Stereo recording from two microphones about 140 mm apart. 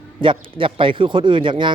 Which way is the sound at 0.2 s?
35° right (ahead or behind).